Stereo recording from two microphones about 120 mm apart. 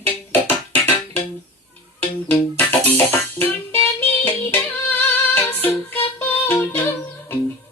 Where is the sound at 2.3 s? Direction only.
15° left (ahead or behind).